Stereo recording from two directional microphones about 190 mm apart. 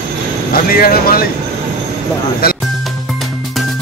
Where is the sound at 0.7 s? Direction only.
50° left (ahead or behind).